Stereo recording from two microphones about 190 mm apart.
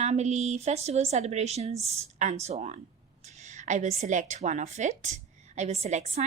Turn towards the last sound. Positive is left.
turn(degrees=-35)  # may be behind; listen again after turning